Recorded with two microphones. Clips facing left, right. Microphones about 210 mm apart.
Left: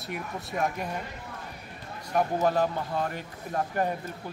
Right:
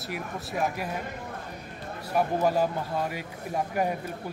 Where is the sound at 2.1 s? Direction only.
10° right (ahead or behind).